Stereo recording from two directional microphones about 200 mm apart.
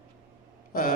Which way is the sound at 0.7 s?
45° left (ahead or behind).